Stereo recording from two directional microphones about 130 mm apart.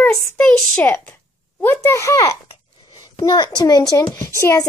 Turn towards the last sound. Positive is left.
turn(degrees=20)  # may be behind; listen again after turning